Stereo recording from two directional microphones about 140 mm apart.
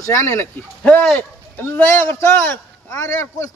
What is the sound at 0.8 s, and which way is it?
A man's voice, 10° left (ahead or behind).